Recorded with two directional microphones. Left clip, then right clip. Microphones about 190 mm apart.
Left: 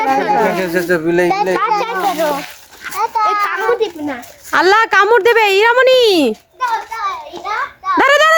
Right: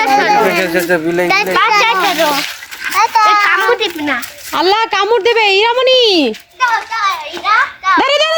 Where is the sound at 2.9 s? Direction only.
10° left (ahead or behind).